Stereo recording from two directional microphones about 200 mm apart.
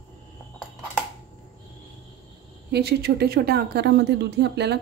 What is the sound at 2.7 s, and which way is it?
Speech, 55° right (ahead or behind).